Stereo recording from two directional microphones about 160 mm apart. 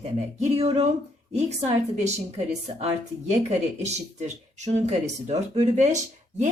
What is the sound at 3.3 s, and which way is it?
Speech, 45° right (ahead or behind).